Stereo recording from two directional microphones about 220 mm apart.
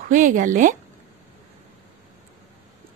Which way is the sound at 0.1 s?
35° right (ahead or behind).